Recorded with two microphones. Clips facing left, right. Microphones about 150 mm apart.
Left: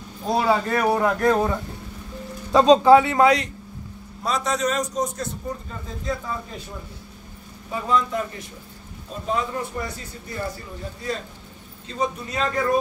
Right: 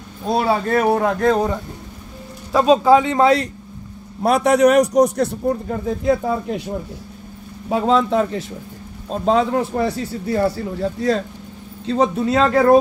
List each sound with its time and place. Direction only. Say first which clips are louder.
0.3 s a man's voice: right 3 dB; 25° right (ahead or behind)
4.2 s a man's voice: right 10 dB; 65° right (ahead or behind)
7.7 s a man's voice: right 7 dB; 85° right